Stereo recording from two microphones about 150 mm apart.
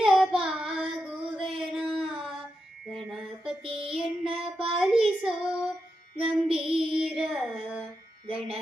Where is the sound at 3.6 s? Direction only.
40° right (ahead or behind).